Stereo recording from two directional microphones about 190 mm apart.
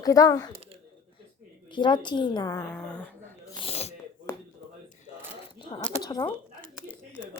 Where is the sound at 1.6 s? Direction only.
25° left (ahead or behind).